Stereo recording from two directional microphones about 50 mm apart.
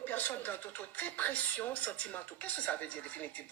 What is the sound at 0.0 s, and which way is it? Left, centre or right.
Speech, left.